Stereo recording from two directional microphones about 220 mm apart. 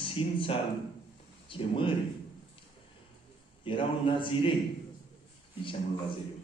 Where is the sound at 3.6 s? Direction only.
20° left (ahead or behind).